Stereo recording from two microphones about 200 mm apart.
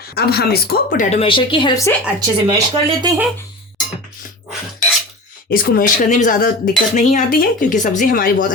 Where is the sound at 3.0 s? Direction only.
20° right (ahead or behind).